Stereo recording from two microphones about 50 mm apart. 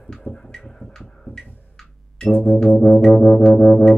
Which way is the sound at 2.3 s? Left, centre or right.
Left.